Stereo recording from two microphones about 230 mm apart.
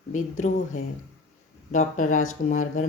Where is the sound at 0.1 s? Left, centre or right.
Left.